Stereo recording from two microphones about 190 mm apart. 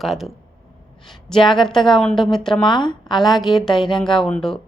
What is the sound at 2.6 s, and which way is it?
Speech, 25° left (ahead or behind).